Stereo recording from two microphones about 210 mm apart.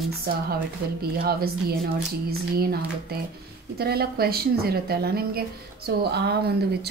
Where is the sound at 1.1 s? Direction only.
45° right (ahead or behind).